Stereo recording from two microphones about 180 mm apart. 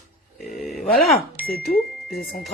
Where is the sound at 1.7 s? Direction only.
Centre (ahead or behind).